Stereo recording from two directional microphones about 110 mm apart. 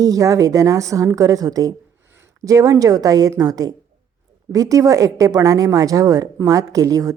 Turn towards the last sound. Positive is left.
turn(degrees=-30)  # may be behind; listen again after turning